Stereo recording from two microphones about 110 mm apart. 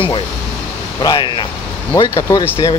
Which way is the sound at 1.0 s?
40° left (ahead or behind).